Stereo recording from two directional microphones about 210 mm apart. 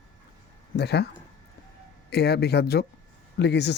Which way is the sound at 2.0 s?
50° left (ahead or behind).